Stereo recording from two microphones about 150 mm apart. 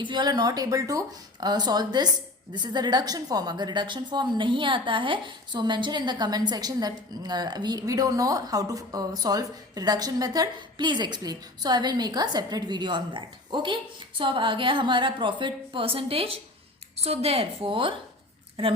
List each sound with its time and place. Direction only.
0.0 s a woman's voice: 30° right (ahead or behind)